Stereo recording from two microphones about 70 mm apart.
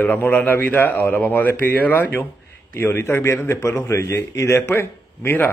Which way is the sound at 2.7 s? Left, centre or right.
Left.